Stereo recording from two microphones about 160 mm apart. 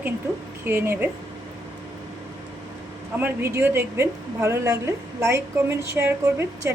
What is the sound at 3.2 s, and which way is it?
A woman's voice, 15° right (ahead or behind).